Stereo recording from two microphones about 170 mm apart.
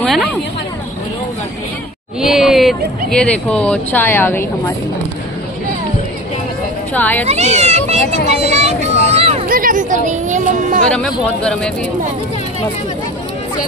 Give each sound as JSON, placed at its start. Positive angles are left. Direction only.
{"t": 0.0, "sound": "a sound", "side_deg": 0}
{"t": 2.1, "sound": "speech", "side_deg": -5}
{"t": 7.0, "sound": "speech", "side_deg": 10}
{"t": 7.2, "sound": "speech", "side_deg": -40}
{"t": 8.3, "sound": "a sound", "side_deg": -40}
{"t": 9.5, "sound": "music", "side_deg": -55}